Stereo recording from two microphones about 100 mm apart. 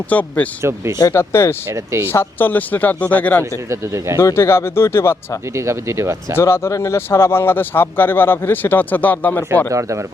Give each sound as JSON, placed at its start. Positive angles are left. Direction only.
{"t": 0.1, "sound": "speech", "side_deg": 15}
{"t": 1.7, "sound": "speech", "side_deg": -30}
{"t": 2.1, "sound": "speech", "side_deg": 20}
{"t": 3.7, "sound": "speech", "side_deg": -30}
{"t": 4.2, "sound": "speech", "side_deg": 25}
{"t": 5.5, "sound": "speech", "side_deg": -30}
{"t": 6.3, "sound": "speech", "side_deg": 25}
{"t": 9.6, "sound": "speech", "side_deg": -30}